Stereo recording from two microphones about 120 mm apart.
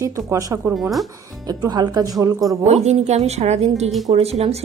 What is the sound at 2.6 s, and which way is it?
A woman's voice, 65° right (ahead or behind).